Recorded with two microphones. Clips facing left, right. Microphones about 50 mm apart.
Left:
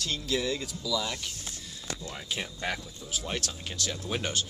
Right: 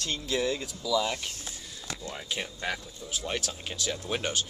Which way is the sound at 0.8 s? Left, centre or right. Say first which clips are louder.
Right 5 dB; right.